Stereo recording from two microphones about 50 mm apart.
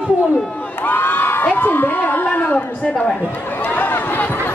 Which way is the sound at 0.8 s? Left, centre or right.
Left.